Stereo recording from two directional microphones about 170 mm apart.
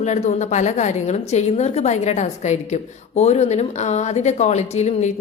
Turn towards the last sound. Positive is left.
turn(degrees=40)  # may be behind; listen again after turning